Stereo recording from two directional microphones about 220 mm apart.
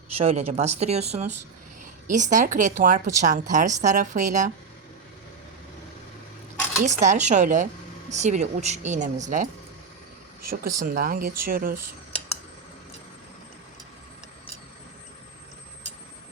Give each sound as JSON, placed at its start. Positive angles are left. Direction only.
{"t": 0.2, "sound": "speech", "side_deg": -30}
{"t": 6.8, "sound": "speech", "side_deg": -30}
{"t": 10.8, "sound": "speech", "side_deg": -40}